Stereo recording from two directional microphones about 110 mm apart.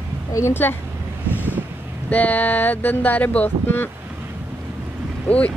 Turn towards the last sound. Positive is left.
turn(degrees=10)  # may be behind; listen again after turning